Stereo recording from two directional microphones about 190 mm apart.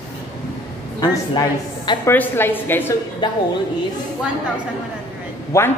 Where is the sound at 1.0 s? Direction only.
20° left (ahead or behind).